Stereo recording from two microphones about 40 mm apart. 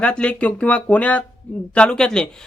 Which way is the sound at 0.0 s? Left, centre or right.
Left.